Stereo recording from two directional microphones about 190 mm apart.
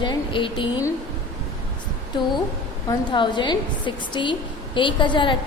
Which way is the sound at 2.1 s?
25° left (ahead or behind).